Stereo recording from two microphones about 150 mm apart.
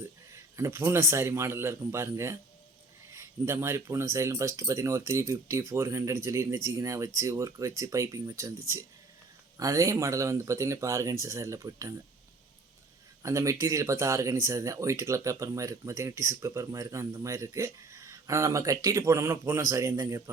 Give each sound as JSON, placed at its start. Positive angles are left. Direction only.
{"t": 0.5, "sound": "speech", "side_deg": -20}
{"t": 13.2, "sound": "speech", "side_deg": -20}